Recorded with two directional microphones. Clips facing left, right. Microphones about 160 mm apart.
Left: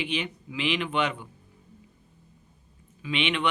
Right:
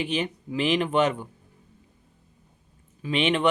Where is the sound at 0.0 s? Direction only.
40° right (ahead or behind).